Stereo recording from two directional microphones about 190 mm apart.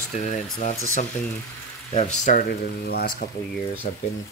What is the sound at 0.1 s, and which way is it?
Speech, 40° left (ahead or behind).